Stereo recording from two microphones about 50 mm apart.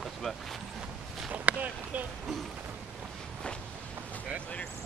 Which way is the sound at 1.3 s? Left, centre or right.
Right.